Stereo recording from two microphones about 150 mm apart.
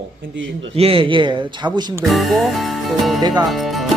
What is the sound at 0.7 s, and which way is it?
Speech, 40° right (ahead or behind).